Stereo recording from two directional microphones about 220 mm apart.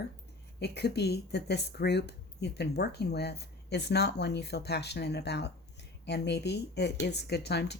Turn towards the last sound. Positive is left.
turn(degrees=50)  # may be behind; listen again after turning